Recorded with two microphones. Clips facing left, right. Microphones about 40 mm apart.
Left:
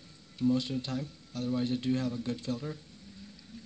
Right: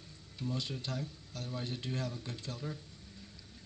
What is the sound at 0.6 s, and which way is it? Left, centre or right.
Speech, left.